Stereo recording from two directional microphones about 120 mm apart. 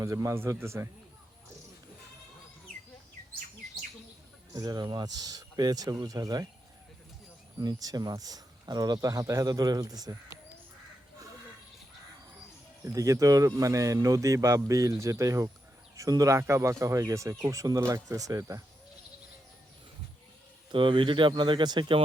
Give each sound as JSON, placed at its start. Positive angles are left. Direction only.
{"t": 0.0, "sound": "speech", "side_deg": -25}
{"t": 4.5, "sound": "speech", "side_deg": -30}
{"t": 7.6, "sound": "speech", "side_deg": -30}
{"t": 12.8, "sound": "speech", "side_deg": -25}
{"t": 20.7, "sound": "speech", "side_deg": -45}